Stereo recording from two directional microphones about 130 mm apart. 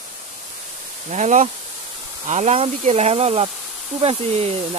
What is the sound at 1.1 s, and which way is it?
Speech, 65° right (ahead or behind).